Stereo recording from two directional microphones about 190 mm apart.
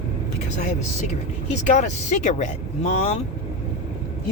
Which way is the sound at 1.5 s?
40° left (ahead or behind).